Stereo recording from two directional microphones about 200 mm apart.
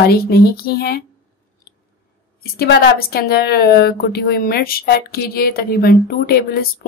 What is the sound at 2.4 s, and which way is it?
A woman's voice, 50° left (ahead or behind).